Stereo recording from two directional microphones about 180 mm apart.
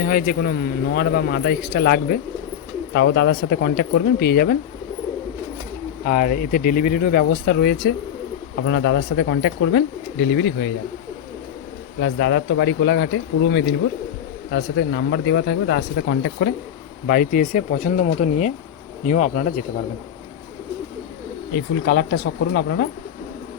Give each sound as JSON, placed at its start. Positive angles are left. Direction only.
{"t": 0.0, "sound": "a man's voice", "side_deg": 55}
{"t": 2.9, "sound": "a man's voice", "side_deg": 70}
{"t": 6.1, "sound": "speech", "side_deg": 50}
{"t": 8.6, "sound": "speech", "side_deg": 90}
{"t": 11.9, "sound": "speech", "side_deg": 85}
{"t": 17.1, "sound": "speech", "side_deg": 50}
{"t": 21.5, "sound": "speech", "side_deg": 75}